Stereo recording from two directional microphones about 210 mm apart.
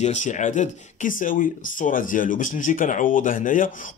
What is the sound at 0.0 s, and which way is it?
Speech, 35° left (ahead or behind).